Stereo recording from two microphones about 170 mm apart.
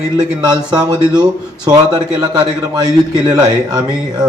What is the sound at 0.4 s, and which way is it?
Speech, 25° right (ahead or behind).